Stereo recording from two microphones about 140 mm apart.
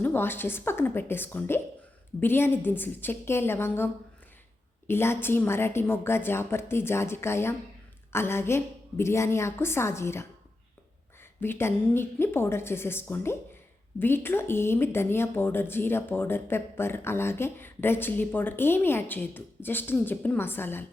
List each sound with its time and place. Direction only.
0.0 s a woman's voice: 15° left (ahead or behind)
4.9 s a woman's voice: 15° left (ahead or behind)
11.3 s a woman's voice: 15° left (ahead or behind)